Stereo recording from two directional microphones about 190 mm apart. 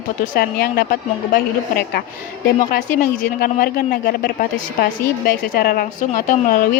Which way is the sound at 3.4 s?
50° left (ahead or behind).